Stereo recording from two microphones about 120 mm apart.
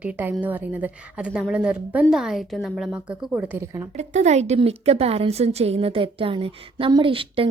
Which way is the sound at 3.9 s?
70° right (ahead or behind).